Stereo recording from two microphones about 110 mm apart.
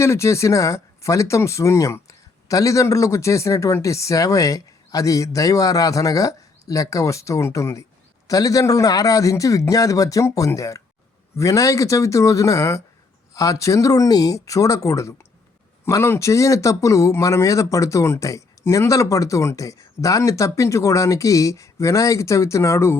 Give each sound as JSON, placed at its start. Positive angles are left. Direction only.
{"t": 0.0, "sound": "a man's voice", "side_deg": 25}